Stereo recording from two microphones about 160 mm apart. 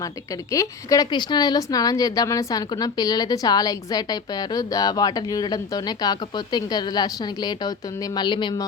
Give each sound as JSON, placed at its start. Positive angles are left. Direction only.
{"t": 0.0, "sound": "a woman's voice", "side_deg": 20}